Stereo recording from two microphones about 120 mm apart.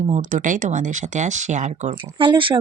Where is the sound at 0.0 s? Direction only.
90° right; by 2.0 s 65° right (ahead or behind).